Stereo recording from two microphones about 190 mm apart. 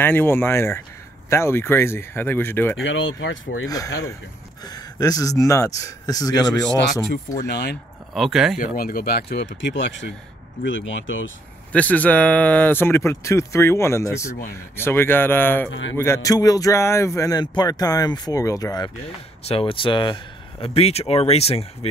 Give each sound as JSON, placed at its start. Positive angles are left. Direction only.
{"t": 0.0, "sound": "speech", "side_deg": 10}
{"t": 2.8, "sound": "speech", "side_deg": 90}
{"t": 3.6, "sound": "speech", "side_deg": 20}
{"t": 7.4, "sound": "speech", "side_deg": 60}
{"t": 8.1, "sound": "speech", "side_deg": 0}
{"t": 8.7, "sound": "speech", "side_deg": 50}
{"t": 11.7, "sound": "speech", "side_deg": 10}
{"t": 19.4, "sound": "speech", "side_deg": 30}